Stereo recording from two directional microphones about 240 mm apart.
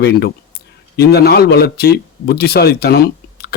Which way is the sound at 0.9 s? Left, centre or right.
Left.